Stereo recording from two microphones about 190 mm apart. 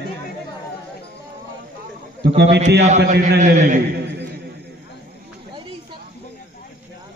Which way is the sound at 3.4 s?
40° right (ahead or behind).